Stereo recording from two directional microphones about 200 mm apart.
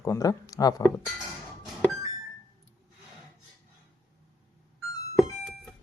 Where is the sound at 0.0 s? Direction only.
15° left (ahead or behind).